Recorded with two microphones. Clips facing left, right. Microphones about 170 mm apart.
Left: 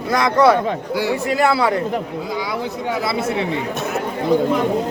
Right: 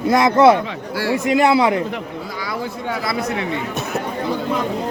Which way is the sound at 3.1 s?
25° left (ahead or behind).